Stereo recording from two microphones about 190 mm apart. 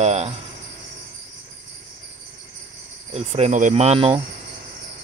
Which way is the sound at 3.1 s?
35° right (ahead or behind).